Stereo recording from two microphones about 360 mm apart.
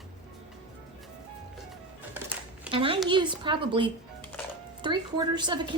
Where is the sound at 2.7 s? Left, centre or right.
Centre.